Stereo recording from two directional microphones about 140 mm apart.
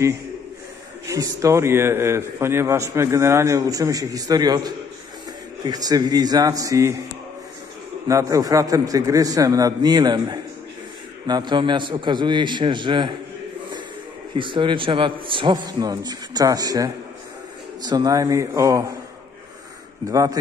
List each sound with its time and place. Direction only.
1.0 s a man's voice: 25° right (ahead or behind)
8.1 s a man's voice: 25° right (ahead or behind)
14.3 s a man's voice: 35° right (ahead or behind)
20.1 s a man's voice: 25° right (ahead or behind)